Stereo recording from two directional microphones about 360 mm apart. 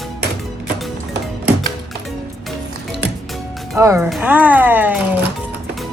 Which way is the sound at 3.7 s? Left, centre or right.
Centre.